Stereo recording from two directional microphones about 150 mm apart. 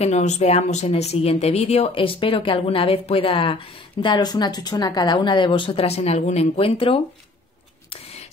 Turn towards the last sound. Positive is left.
turn(degrees=40)  # may be behind; listen again after turning